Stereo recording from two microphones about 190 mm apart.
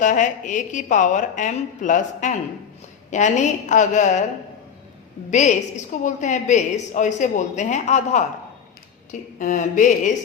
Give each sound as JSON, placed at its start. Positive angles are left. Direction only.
{"t": 0.0, "sound": "a woman's voice", "side_deg": 40}
{"t": 5.3, "sound": "a woman's voice", "side_deg": 40}
{"t": 9.4, "sound": "a woman's voice", "side_deg": 40}